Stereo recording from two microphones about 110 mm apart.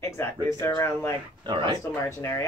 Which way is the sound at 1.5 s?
45° right (ahead or behind).